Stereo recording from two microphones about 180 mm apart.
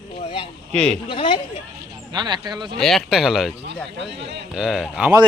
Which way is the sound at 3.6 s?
75° right (ahead or behind).